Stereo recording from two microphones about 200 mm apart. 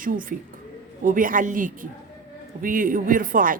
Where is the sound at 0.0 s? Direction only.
45° right (ahead or behind).